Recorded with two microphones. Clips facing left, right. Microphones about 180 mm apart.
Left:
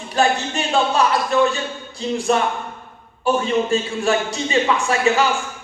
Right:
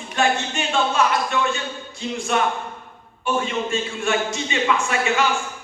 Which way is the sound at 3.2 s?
35° left (ahead or behind).